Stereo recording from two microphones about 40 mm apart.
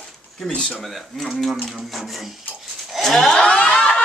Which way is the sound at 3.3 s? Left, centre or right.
Left.